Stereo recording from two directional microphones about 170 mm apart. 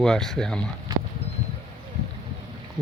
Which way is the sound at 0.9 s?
20° right (ahead or behind).